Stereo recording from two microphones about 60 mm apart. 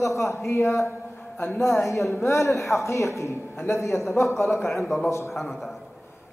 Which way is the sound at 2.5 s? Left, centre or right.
Centre.